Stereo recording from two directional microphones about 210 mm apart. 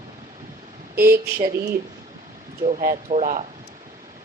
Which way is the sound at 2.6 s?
35° right (ahead or behind).